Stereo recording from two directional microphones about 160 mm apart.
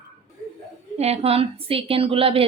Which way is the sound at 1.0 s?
40° right (ahead or behind).